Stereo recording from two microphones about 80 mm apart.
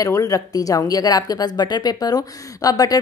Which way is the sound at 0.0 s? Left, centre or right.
Left.